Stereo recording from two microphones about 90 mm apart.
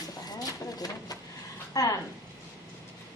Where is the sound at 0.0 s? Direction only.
45° left (ahead or behind).